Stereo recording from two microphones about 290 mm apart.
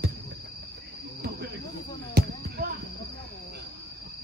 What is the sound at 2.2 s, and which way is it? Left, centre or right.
Basketball bounce, right.